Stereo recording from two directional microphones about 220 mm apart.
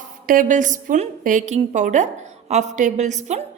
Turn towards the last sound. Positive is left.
turn(degrees=-30)  # may be behind; listen again after turning